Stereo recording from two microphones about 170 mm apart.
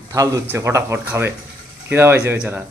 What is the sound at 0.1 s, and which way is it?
Speech, 15° right (ahead or behind).